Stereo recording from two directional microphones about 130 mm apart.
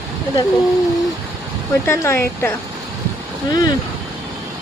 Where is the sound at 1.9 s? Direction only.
15° left (ahead or behind).